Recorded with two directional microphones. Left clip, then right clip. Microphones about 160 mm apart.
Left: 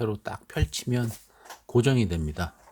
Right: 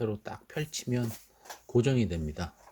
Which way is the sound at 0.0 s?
30° left (ahead or behind).